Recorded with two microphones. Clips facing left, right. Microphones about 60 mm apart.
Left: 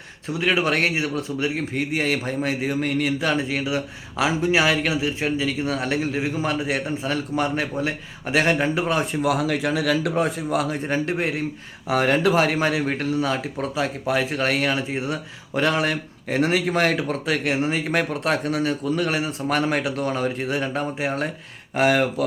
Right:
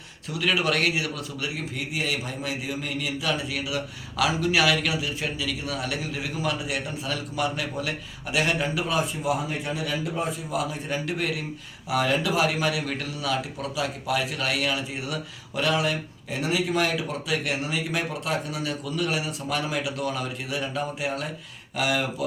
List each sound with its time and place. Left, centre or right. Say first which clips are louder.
0.3 s speech: left 3 dB; left
9.2 s a man's voice: left 6 dB; left
10.5 s speech: left 5 dB; left
11.9 s speech: left 5 dB; left
18.6 s speech: left 6 dB; left